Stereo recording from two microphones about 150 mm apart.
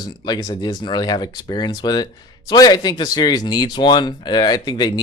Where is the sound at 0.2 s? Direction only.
30° left (ahead or behind).